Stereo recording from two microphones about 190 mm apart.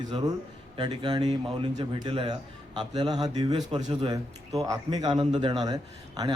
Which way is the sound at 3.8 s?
35° right (ahead or behind).